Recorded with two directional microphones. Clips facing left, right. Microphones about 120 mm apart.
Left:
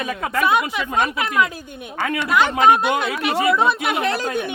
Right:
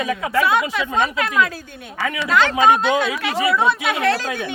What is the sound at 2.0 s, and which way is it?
Speech, 50° left (ahead or behind).